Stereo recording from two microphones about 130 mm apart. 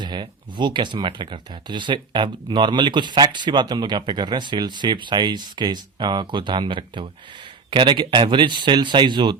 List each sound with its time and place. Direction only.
0.0 s speech: 35° right (ahead or behind)